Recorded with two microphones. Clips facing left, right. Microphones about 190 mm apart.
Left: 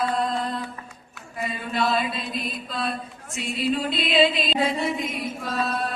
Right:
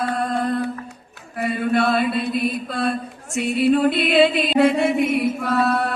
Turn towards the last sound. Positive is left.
turn(degrees=-65)  # may be behind; listen again after turning